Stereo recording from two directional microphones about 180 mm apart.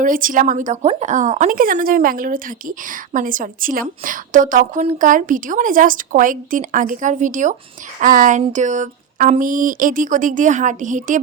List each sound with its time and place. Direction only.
0.0 s a woman's voice: 50° right (ahead or behind)